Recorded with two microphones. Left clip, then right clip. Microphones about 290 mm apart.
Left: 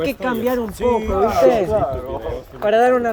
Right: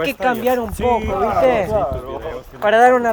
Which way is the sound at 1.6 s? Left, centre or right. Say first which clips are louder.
Even; right.